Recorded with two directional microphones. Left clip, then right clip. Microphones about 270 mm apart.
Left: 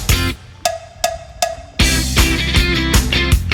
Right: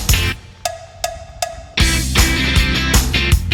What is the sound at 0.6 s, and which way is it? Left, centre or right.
Percussion, centre.